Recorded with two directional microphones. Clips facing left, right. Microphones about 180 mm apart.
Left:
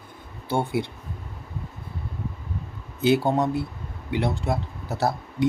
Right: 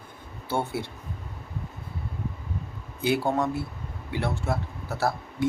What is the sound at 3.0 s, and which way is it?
Speech, 20° left (ahead or behind).